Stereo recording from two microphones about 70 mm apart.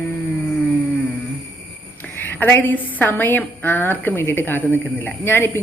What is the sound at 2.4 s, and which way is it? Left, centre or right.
A woman's voice, left.